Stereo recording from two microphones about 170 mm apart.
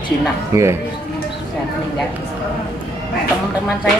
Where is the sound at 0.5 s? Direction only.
15° right (ahead or behind).